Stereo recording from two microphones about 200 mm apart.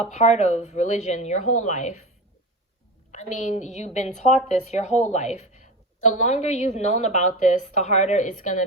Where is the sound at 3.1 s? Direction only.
35° left (ahead or behind).